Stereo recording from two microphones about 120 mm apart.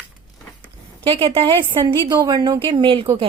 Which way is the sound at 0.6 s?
45° right (ahead or behind).